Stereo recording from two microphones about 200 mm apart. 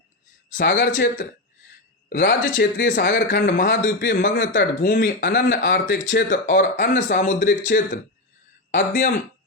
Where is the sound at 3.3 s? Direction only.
60° left (ahead or behind).